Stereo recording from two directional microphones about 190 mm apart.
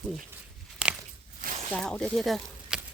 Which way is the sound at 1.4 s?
40° right (ahead or behind).